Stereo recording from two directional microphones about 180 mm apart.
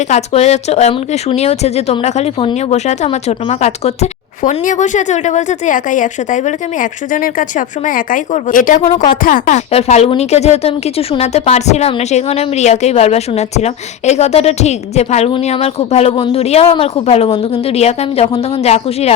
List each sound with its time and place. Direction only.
0.1 s speech: 35° left (ahead or behind)